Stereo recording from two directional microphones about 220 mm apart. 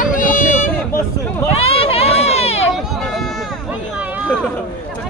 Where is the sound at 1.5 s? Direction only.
25° left (ahead or behind).